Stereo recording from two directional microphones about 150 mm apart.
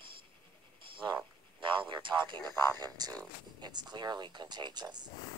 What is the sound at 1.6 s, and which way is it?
Speech, 35° right (ahead or behind).